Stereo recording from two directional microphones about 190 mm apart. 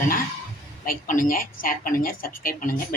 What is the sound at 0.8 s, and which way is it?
Speech, 45° left (ahead or behind).